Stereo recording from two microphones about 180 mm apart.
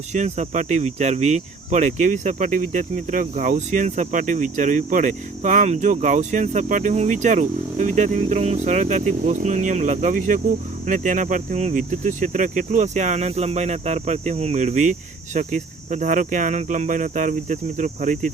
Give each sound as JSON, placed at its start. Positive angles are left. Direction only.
{"t": 0.1, "sound": "cricket", "side_deg": -40}